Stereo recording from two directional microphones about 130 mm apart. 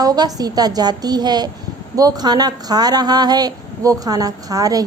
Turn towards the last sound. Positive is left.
turn(degrees=-30)  # may be behind; listen again after turning